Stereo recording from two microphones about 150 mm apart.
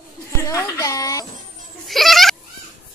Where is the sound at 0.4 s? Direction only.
20° left (ahead or behind).